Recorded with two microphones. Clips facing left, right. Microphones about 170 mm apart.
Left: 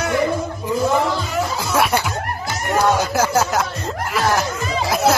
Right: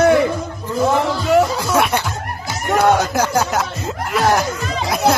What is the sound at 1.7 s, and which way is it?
Snicker, 5° left (ahead or behind).